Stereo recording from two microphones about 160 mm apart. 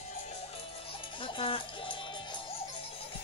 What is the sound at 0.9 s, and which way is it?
Music, 35° left (ahead or behind).